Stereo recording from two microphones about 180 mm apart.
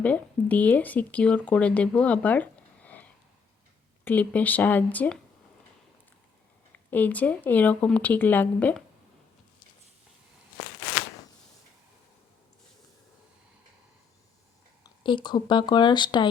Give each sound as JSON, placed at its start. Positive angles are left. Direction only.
{"t": 0.0, "sound": "speech", "side_deg": 10}
{"t": 6.7, "sound": "speech", "side_deg": 10}
{"t": 14.8, "sound": "speech", "side_deg": 25}